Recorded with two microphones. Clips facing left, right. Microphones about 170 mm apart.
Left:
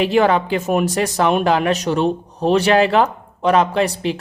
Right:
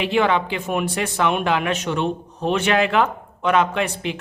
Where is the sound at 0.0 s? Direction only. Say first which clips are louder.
Left 4 dB; 40° left (ahead or behind).